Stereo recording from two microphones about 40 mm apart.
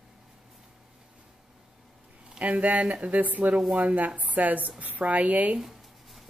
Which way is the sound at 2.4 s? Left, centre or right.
Right.